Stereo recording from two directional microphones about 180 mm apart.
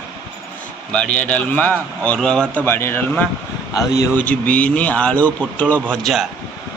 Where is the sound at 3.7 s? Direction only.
20° left (ahead or behind).